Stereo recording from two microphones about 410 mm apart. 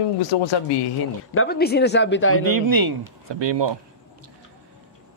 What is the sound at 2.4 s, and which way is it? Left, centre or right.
Speech, right.